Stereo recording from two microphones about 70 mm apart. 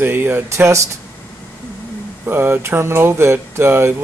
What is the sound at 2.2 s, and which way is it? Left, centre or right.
Speech, right.